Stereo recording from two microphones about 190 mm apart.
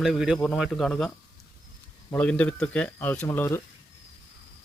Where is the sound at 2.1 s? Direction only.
5° left (ahead or behind).